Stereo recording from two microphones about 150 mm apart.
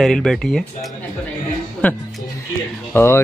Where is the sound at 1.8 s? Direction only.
10° left (ahead or behind).